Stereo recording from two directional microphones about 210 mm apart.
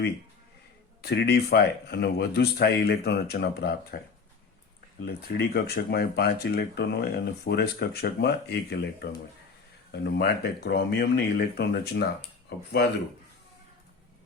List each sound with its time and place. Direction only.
1.0 s speech: 50° left (ahead or behind)
5.0 s speech: 50° left (ahead or behind)